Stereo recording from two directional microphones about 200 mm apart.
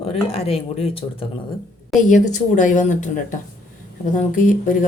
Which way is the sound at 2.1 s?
40° left (ahead or behind).